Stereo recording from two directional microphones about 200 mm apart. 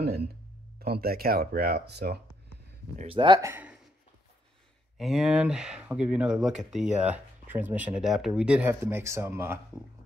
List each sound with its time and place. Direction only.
0.0 s a sound: 55° right (ahead or behind)
0.7 s speech: 50° right (ahead or behind)
3.0 s speech: 25° right (ahead or behind)
4.9 s speech: centre (ahead or behind)